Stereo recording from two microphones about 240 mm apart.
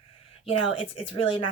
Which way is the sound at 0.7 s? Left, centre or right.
Left.